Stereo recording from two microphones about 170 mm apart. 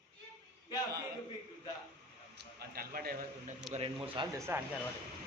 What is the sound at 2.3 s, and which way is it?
A man's voice, 65° right (ahead or behind).